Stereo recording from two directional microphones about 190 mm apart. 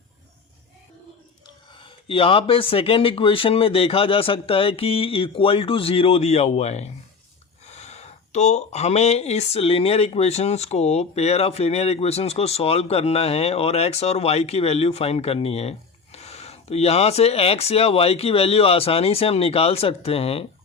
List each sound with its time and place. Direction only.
2.0 s speech: 30° left (ahead or behind)